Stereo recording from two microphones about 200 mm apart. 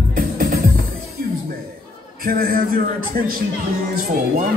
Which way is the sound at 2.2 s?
45° right (ahead or behind).